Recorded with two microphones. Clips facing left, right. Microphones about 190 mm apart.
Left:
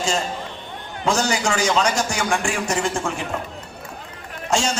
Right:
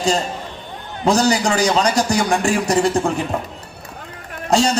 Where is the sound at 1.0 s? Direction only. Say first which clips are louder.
Right 5 dB; 35° right (ahead or behind).